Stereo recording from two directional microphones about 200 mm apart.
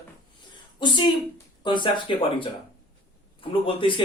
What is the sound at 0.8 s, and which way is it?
Speech, 25° left (ahead or behind).